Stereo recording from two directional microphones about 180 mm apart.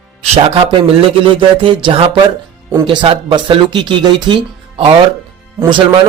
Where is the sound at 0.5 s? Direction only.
30° right (ahead or behind).